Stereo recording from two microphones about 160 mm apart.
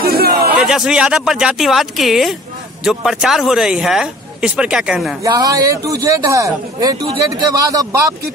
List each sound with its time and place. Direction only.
0.0 s a sound: 75° right (ahead or behind)
0.6 s speech: 5° right (ahead or behind)
5.2 s a man's voice: 20° right (ahead or behind)